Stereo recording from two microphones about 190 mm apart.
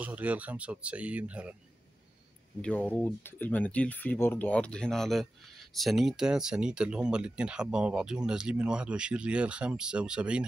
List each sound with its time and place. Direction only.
0.0 s speech: 5° right (ahead or behind)
2.6 s speech: 10° left (ahead or behind)